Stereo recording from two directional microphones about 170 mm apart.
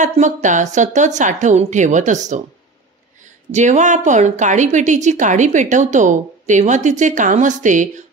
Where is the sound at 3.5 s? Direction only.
45° right (ahead or behind).